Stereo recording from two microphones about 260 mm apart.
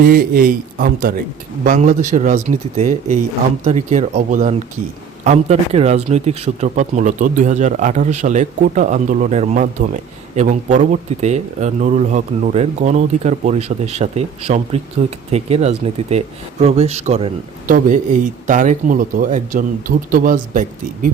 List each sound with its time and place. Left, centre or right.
0.0 s a man's voice: right